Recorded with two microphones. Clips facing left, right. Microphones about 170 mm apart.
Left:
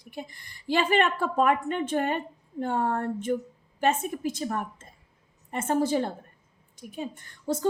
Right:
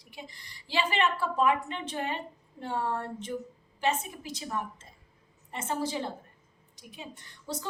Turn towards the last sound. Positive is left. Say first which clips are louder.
# left 10 dB
turn(degrees=50)  # may be behind; listen again after turning